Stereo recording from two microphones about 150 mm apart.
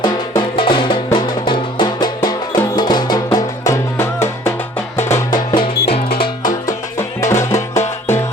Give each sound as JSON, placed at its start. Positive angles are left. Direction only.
{"t": 0.0, "sound": "music", "side_deg": 30}
{"t": 7.2, "sound": "music", "side_deg": 20}